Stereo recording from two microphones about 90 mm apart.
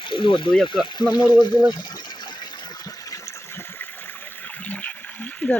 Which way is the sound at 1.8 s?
55° left (ahead or behind).